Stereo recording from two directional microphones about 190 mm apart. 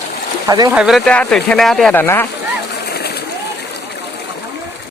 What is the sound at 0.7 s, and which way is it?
Speech, 5° right (ahead or behind).